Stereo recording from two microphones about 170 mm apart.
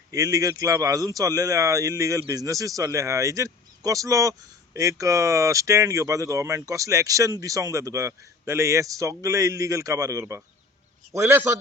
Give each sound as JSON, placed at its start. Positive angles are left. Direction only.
{"t": 0.1, "sound": "a man's voice", "side_deg": -20}